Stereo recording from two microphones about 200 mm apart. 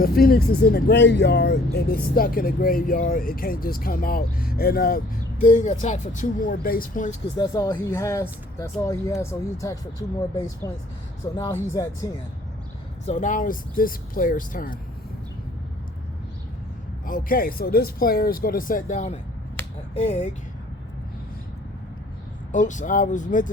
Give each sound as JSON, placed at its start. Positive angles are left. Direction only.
{"t": 0.0, "sound": "speech", "side_deg": 50}
{"t": 5.4, "sound": "speech", "side_deg": 40}
{"t": 7.3, "sound": "speech", "side_deg": 20}
{"t": 11.3, "sound": "speech", "side_deg": 15}
{"t": 13.1, "sound": "speech", "side_deg": 40}
{"t": 17.1, "sound": "speech", "side_deg": 45}
{"t": 22.5, "sound": "speech", "side_deg": 40}